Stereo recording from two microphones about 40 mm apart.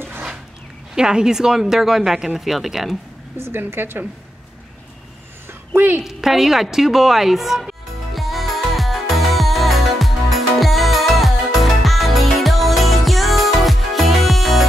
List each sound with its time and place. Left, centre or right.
0.9 s speech: centre
3.3 s speech: right
5.8 s a woman's voice: right
6.0 s music: centre